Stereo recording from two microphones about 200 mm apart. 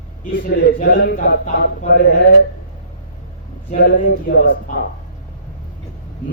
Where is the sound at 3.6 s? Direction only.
45° left (ahead or behind).